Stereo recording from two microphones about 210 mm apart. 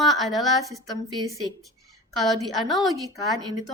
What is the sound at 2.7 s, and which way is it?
Speech, centre (ahead or behind).